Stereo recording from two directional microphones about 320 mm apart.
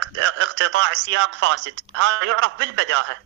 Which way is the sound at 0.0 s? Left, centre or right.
Right.